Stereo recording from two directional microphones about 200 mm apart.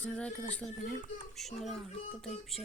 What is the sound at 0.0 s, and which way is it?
Speech, 5° left (ahead or behind).